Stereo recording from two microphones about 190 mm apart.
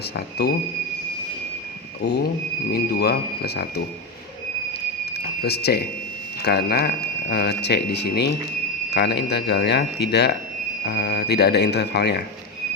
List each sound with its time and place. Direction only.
0.4 s speech: 60° left (ahead or behind)
2.7 s speech: 55° left (ahead or behind)
5.1 s a sound: 60° left (ahead or behind)
6.4 s speech: 60° left (ahead or behind)